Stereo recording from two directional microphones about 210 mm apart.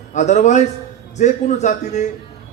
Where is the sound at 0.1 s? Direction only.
35° left (ahead or behind).